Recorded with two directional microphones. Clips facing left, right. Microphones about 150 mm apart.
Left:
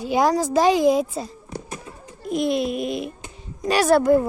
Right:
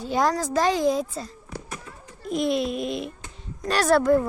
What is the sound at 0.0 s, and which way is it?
Speech, 5° left (ahead or behind).